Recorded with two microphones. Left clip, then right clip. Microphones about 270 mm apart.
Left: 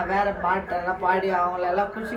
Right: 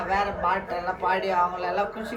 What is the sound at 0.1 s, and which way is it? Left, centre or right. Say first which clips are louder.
A woman's voice: even; centre.